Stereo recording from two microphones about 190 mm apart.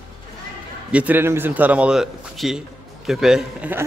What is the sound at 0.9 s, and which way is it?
A man's voice, 10° right (ahead or behind).